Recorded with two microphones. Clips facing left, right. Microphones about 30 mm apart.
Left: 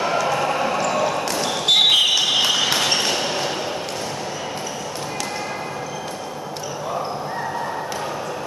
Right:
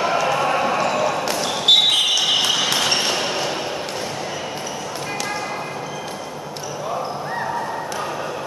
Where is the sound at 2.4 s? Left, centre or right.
Centre.